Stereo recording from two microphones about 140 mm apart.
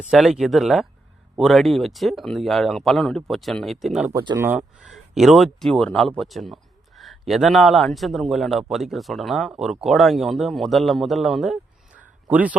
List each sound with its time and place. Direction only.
0.1 s speech: centre (ahead or behind)
4.1 s speech: 30° right (ahead or behind)
4.4 s speech: 10° right (ahead or behind)
4.9 s speech: centre (ahead or behind)
11.9 s a sound: 10° right (ahead or behind)